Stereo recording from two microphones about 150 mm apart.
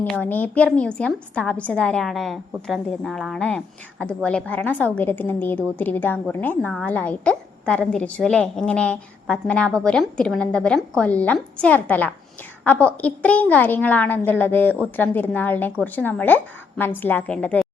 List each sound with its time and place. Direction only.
0.0 s a woman's voice: 10° left (ahead or behind)